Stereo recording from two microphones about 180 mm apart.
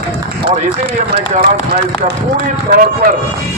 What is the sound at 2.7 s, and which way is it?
Speech, 50° right (ahead or behind).